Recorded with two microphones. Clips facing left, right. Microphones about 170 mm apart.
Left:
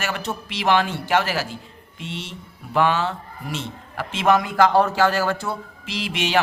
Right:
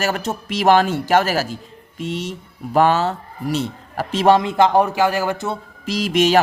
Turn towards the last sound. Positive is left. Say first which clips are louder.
# right 7 dB
turn(degrees=-40)  # may be behind; listen again after turning